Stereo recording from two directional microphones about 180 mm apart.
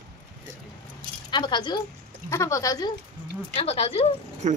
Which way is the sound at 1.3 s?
25° left (ahead or behind).